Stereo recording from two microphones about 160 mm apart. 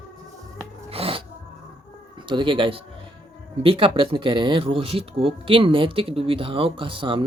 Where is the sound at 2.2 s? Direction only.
30° right (ahead or behind).